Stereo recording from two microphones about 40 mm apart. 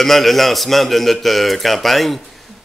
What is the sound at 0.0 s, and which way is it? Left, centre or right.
Speech, centre.